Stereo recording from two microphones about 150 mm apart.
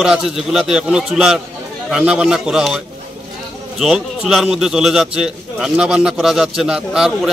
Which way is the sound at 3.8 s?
5° right (ahead or behind).